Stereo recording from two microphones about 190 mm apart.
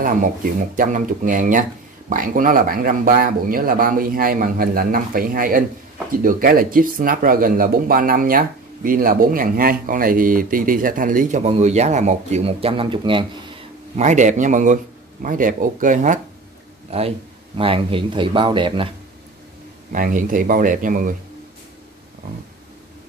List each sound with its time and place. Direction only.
0.7 s speech: 45° right (ahead or behind); by 13.2 s 25° right (ahead or behind)
13.9 s a man's voice: 40° right (ahead or behind)
16.9 s a man's voice: 30° right (ahead or behind)
19.9 s speech: 45° right (ahead or behind)